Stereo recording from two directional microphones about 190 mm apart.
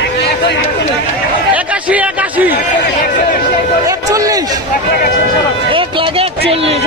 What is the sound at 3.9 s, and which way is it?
Speech, 20° right (ahead or behind).